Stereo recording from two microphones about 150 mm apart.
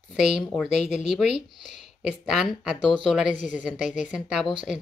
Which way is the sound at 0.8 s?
Centre (ahead or behind).